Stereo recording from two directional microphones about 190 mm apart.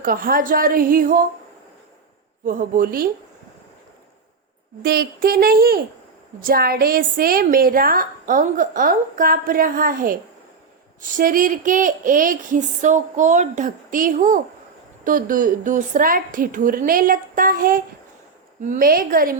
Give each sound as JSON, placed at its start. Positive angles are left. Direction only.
{"t": 0.0, "sound": "a woman's voice", "side_deg": -50}
{"t": 2.4, "sound": "a woman's voice", "side_deg": -45}
{"t": 4.8, "sound": "a woman's voice", "side_deg": -55}